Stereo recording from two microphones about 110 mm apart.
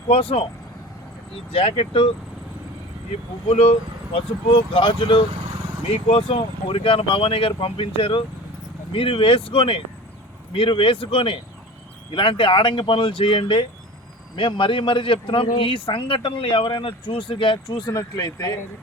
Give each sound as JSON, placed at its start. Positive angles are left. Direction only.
{"t": 0.1, "sound": "speech", "side_deg": 55}
{"t": 1.5, "sound": "speech", "side_deg": 55}
{"t": 3.5, "sound": "a man's voice", "side_deg": 65}
{"t": 6.1, "sound": "a man's voice", "side_deg": 60}